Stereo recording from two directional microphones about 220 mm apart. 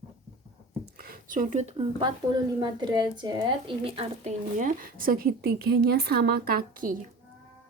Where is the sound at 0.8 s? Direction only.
40° right (ahead or behind).